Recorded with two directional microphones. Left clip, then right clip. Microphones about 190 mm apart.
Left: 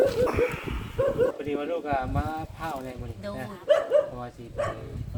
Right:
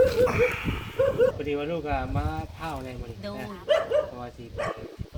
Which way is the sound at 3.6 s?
65° left (ahead or behind).